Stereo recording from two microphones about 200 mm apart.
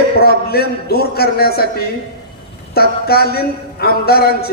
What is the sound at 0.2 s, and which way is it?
A man's voice, 50° left (ahead or behind).